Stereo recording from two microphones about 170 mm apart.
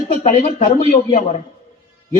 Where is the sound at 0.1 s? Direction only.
45° left (ahead or behind).